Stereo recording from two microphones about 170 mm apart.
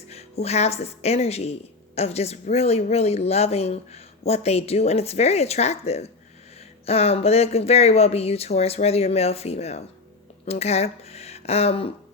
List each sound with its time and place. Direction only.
0.1 s speech: 40° left (ahead or behind)